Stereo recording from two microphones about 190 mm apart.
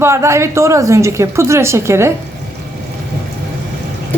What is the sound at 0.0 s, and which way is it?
A woman's voice, 15° right (ahead or behind).